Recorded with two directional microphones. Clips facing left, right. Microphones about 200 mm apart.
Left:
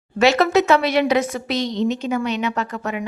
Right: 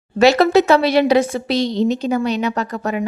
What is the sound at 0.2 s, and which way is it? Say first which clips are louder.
A woman's voice: right 4 dB; 35° right (ahead or behind).